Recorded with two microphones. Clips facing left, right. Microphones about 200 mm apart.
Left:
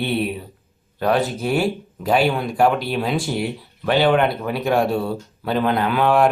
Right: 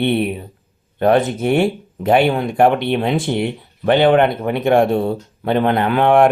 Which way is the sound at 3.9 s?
55° right (ahead or behind).